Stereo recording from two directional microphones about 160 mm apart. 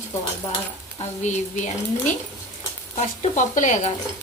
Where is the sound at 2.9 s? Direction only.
50° left (ahead or behind).